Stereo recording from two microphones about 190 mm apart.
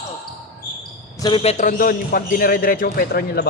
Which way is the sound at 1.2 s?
30° left (ahead or behind).